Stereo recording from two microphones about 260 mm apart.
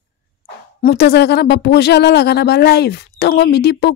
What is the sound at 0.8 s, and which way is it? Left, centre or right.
Speech, left.